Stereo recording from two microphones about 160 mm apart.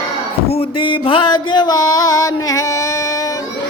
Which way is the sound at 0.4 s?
35° left (ahead or behind).